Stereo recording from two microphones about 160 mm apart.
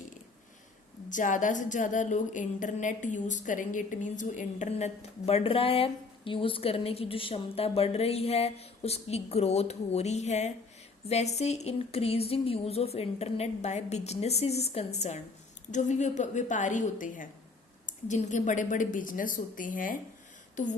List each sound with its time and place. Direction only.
1.1 s a woman's voice: 55° left (ahead or behind)